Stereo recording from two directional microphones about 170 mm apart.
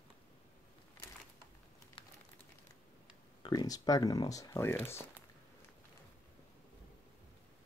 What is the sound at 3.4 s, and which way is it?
Speech, 25° left (ahead or behind).